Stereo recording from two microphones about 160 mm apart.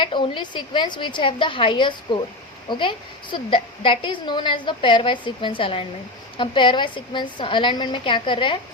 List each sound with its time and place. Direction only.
0.0 s a woman's voice: 30° left (ahead or behind)